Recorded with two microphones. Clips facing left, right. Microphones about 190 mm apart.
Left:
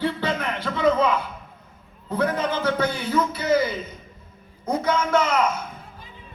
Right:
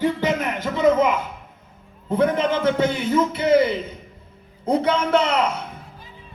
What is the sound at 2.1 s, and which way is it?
A man's voice, 25° right (ahead or behind).